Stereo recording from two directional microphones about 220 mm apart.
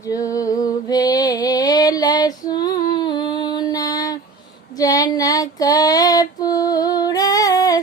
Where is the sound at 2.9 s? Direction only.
20° left (ahead or behind).